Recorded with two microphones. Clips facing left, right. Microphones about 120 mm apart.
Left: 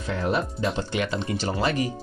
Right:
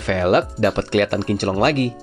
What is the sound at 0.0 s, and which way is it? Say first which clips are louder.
Speech: right 9 dB; 85° right.